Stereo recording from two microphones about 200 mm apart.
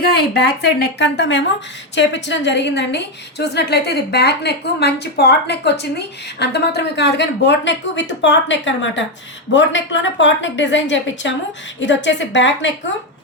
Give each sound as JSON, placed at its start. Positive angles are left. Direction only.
{"t": 0.2, "sound": "a woman's voice", "side_deg": 50}